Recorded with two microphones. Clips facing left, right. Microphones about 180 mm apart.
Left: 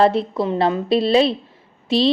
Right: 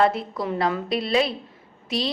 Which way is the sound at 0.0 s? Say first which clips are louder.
Left 5 dB; 25° left (ahead or behind).